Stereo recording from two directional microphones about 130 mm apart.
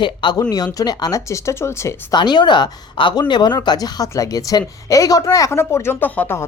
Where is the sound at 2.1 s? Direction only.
35° left (ahead or behind).